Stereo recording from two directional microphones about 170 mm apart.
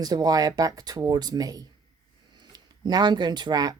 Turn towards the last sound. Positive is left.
turn(degrees=-25)  # may be behind; listen again after turning